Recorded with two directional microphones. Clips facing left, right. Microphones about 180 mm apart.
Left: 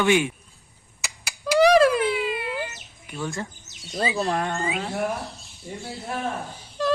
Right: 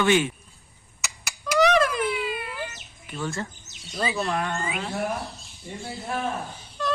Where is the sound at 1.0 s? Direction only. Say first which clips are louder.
Left 2 dB; 30° left (ahead or behind).